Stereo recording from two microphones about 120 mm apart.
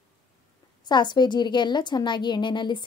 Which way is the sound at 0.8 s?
40° left (ahead or behind).